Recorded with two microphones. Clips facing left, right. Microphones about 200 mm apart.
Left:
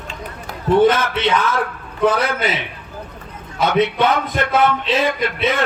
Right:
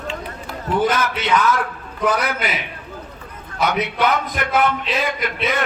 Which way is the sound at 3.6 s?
25° left (ahead or behind).